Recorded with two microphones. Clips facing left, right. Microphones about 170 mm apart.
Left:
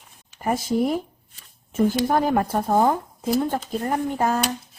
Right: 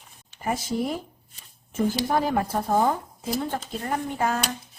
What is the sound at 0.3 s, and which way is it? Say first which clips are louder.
Speech: left 5 dB; 50° left (ahead or behind).